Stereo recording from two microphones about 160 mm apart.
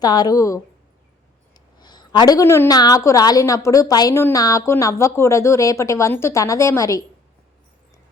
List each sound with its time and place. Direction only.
0.0 s a woman's voice: 25° left (ahead or behind)
1.8 s a woman's voice: 25° left (ahead or behind)